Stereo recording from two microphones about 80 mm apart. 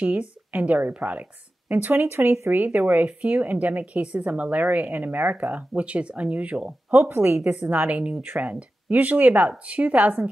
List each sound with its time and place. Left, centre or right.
0.0 s speech: centre
2.6 s speech: centre
7.6 s speech: centre